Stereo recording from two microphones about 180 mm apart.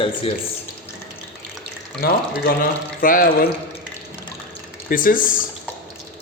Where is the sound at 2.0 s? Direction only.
55° left (ahead or behind).